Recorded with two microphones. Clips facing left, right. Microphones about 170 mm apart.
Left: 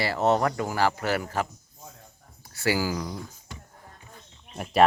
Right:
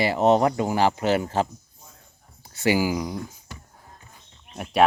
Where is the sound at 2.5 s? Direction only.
20° right (ahead or behind).